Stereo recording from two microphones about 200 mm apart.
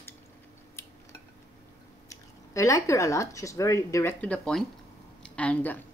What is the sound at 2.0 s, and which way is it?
Speech, 15° left (ahead or behind).